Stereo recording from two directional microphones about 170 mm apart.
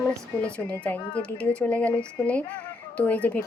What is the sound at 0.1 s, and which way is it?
Speech, 5° left (ahead or behind).